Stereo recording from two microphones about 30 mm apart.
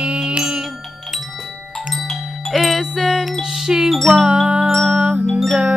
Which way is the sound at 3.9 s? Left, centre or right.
Centre.